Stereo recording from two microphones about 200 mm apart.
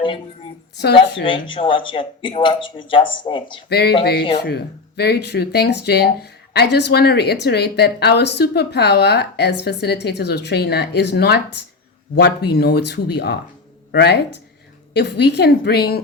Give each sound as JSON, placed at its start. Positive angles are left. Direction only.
{"t": 1.2, "sound": "speech", "side_deg": 25}
{"t": 3.7, "sound": "speech", "side_deg": 55}